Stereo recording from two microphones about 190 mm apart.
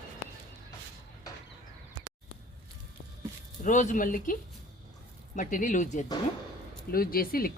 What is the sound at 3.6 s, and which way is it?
Speech, 40° left (ahead or behind).